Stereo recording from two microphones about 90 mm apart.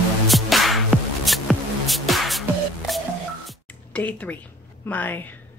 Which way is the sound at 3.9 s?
20° left (ahead or behind).